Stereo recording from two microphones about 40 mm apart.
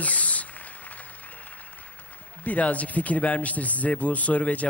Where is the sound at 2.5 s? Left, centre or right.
Left.